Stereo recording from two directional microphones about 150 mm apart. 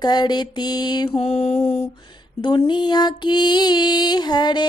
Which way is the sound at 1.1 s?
45° left (ahead or behind).